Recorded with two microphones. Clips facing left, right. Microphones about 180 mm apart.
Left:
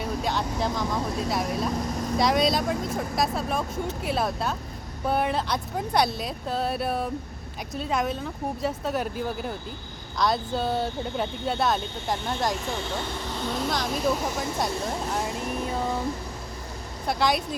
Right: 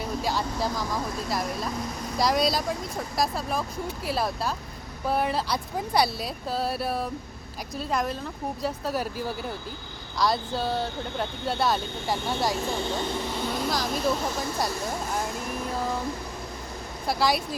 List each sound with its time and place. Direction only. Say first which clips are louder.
0.0 s vehicle: left 1 dB; centre (ahead or behind)
0.8 s speech: left 3 dB; centre (ahead or behind)
13.5 s vehicle: left 2 dB; centre (ahead or behind)
14.0 s speech: left 1 dB; 15° left (ahead or behind)
17.1 s speech: even; 5° right (ahead or behind)